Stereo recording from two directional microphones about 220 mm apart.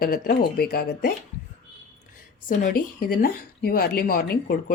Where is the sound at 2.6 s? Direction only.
40° left (ahead or behind).